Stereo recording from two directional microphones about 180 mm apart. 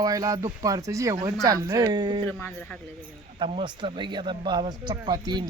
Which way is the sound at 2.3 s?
5° left (ahead or behind).